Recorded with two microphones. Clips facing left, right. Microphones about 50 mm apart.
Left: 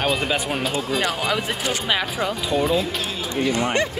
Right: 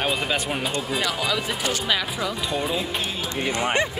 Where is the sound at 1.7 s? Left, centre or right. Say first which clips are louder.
Left 2 dB; left.